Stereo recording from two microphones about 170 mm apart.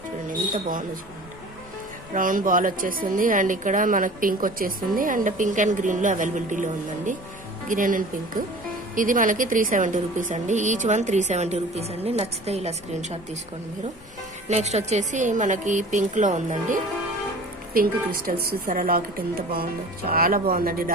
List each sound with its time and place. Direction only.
0.5 s a woman's voice: 50° right (ahead or behind)
2.1 s a woman's voice: 50° right (ahead or behind)
14.4 s a woman's voice: 40° right (ahead or behind)
17.7 s speech: 60° right (ahead or behind)
20.1 s speech: 60° right (ahead or behind)